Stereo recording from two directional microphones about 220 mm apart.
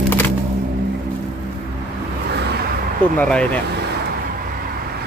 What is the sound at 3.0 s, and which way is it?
Speech, 5° left (ahead or behind).